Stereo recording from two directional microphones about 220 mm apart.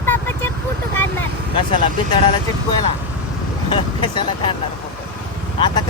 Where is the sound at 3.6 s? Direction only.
20° left (ahead or behind).